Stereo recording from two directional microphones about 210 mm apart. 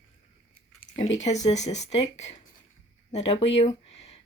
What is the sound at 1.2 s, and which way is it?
Speech, 35° left (ahead or behind).